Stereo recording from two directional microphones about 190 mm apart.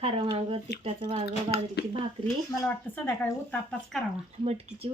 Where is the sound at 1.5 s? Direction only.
55° left (ahead or behind).